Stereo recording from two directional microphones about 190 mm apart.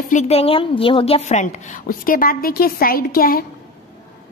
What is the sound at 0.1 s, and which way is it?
A woman's voice, 35° left (ahead or behind).